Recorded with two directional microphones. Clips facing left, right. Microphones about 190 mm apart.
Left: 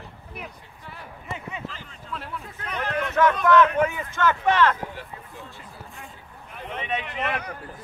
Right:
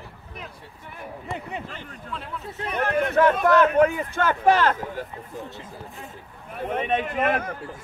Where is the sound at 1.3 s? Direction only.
40° right (ahead or behind).